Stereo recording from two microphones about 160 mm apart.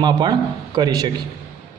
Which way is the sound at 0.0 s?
25° right (ahead or behind).